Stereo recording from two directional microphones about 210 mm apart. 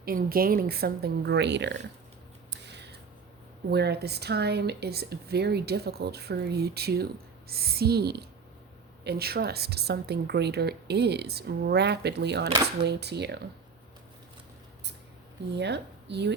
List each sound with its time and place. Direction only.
0.0 s speech: 45° right (ahead or behind)
2.5 s a sound: 55° right (ahead or behind)
3.7 s speech: 50° right (ahead or behind)
15.5 s a woman's voice: 55° right (ahead or behind)